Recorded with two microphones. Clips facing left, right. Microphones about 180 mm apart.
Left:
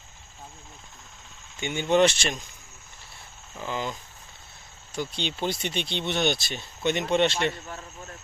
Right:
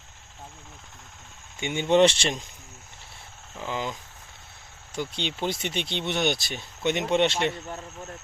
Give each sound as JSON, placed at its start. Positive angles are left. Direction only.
{"t": 1.6, "sound": "speech", "side_deg": -20}
{"t": 3.6, "sound": "speech", "side_deg": -15}
{"t": 4.9, "sound": "speech", "side_deg": -15}